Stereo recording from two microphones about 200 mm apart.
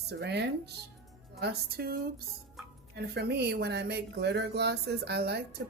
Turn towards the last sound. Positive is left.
turn(degrees=-55)  # may be behind; listen again after turning